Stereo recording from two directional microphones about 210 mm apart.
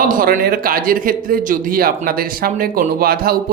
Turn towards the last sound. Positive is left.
turn(degrees=-45)  # may be behind; listen again after turning